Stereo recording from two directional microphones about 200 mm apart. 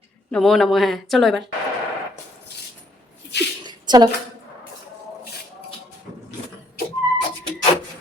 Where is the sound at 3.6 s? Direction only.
20° right (ahead or behind).